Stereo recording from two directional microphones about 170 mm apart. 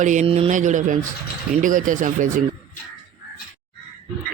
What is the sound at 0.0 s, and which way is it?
Speech, 45° right (ahead or behind).